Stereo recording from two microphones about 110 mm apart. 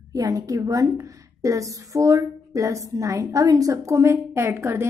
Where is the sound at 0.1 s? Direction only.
35° right (ahead or behind).